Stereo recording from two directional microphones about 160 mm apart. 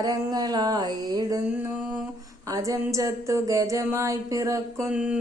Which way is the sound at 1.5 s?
10° right (ahead or behind).